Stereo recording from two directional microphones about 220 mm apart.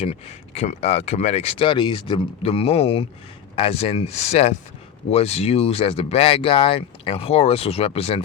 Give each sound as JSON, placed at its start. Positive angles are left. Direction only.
{"t": 0.0, "sound": "speech", "side_deg": 25}